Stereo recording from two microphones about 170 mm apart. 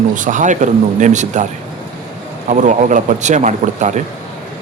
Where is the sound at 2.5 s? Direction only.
45° right (ahead or behind).